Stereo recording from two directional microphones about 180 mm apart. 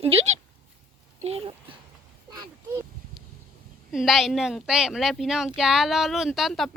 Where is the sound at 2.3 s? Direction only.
20° right (ahead or behind).